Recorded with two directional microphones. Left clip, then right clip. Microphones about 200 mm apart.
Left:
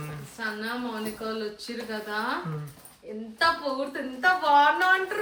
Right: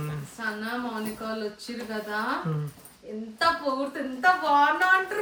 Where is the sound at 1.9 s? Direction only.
5° right (ahead or behind).